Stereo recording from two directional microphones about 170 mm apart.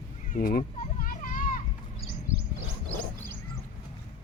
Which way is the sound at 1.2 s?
50° left (ahead or behind).